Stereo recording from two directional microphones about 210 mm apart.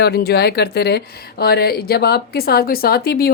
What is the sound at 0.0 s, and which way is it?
Speech, 50° left (ahead or behind).